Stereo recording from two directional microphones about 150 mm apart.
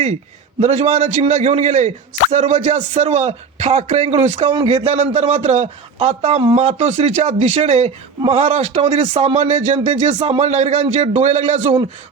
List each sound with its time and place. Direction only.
0.6 s speech: 50° right (ahead or behind)